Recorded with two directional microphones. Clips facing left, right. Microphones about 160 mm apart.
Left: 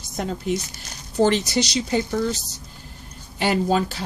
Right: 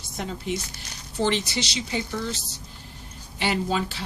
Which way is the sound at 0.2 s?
45° left (ahead or behind).